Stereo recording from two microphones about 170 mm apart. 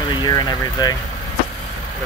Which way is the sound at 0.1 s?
25° left (ahead or behind).